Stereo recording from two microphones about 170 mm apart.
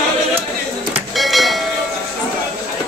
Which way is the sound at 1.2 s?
Centre (ahead or behind).